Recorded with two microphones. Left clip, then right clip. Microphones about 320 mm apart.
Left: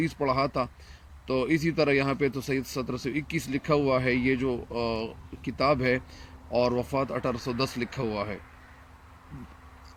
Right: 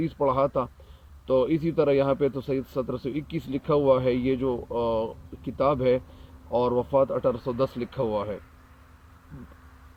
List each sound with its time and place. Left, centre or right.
0.0 s speech: centre